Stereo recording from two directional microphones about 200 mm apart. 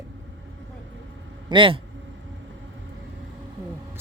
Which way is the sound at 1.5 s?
25° right (ahead or behind).